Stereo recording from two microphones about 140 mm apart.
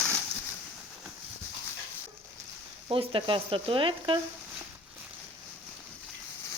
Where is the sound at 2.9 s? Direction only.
40° right (ahead or behind).